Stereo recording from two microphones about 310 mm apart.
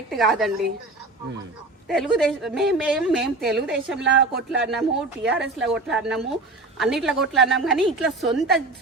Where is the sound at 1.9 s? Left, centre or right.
Centre.